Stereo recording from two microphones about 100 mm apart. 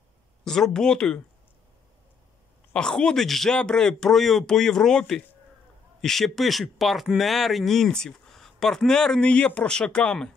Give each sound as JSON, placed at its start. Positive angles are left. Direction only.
{"t": 0.5, "sound": "speech", "side_deg": 5}
{"t": 2.7, "sound": "speech", "side_deg": 10}